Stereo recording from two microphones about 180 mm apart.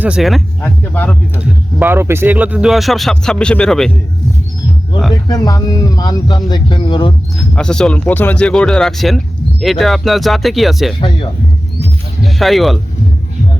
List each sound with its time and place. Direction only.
0.0 s speech: 5° right (ahead or behind)
1.4 s speech: 10° right (ahead or behind)
5.3 s speech: 20° left (ahead or behind)
7.3 s speech: 5° left (ahead or behind)
12.2 s speech: centre (ahead or behind)